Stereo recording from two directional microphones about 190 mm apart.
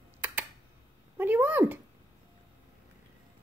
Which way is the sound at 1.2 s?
10° right (ahead or behind).